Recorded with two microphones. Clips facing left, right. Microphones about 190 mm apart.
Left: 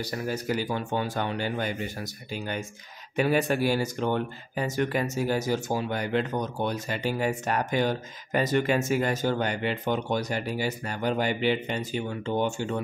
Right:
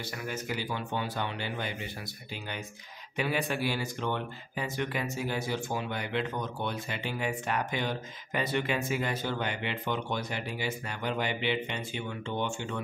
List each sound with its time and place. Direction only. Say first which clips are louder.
0.0 s speech: left 6 dB; 40° left (ahead or behind)